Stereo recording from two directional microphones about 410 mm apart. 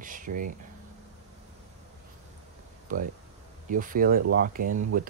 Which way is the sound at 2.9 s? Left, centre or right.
Centre.